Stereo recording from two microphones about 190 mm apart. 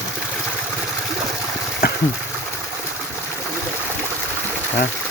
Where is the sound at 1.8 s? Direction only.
50° left (ahead or behind).